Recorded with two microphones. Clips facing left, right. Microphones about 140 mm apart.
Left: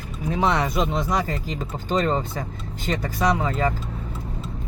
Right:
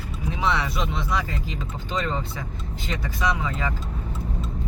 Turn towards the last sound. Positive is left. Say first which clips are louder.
# left 5 dB
turn(degrees=45)  # may be behind; listen again after turning